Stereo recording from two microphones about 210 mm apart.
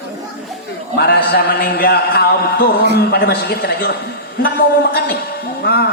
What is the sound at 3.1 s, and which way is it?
Speech, 50° left (ahead or behind).